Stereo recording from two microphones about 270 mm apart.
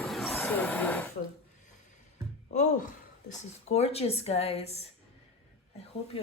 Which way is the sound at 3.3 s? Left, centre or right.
Left.